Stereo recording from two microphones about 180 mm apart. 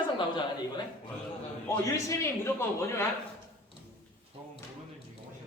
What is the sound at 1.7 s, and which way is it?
A man's voice, 15° left (ahead or behind).